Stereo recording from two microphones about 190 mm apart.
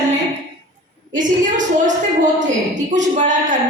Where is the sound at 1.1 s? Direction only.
40° right (ahead or behind).